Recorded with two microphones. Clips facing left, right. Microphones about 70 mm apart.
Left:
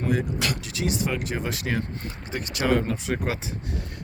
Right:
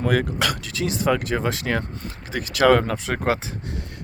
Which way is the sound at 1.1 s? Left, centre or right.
Right.